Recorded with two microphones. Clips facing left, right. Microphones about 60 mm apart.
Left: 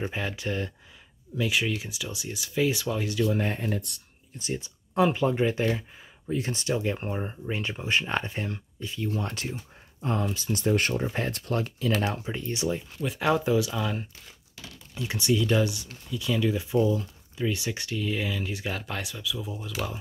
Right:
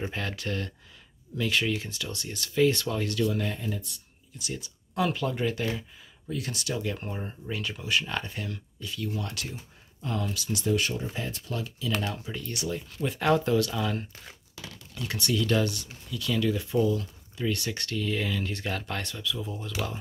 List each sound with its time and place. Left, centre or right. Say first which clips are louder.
0.0 s speech: left 2 dB; centre
3.3 s speech: left 3 dB; left
4.4 s speech: left 4 dB; left
12.0 s speech: left 4 dB; left
13.0 s speech: right 1 dB; centre
15.0 s speech: left 3 dB; centre